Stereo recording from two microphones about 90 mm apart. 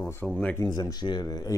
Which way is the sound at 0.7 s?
50° left (ahead or behind).